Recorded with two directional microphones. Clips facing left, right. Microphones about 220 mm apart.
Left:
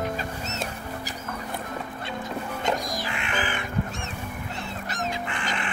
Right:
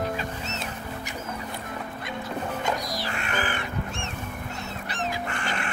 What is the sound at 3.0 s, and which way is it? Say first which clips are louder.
Music: even; 40° right (ahead or behind).